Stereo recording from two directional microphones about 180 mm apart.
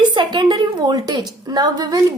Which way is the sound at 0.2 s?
25° right (ahead or behind).